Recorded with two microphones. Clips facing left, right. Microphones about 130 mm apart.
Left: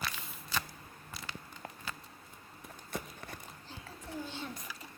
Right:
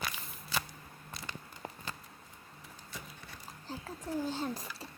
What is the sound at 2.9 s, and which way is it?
Clip-clop, 55° left (ahead or behind).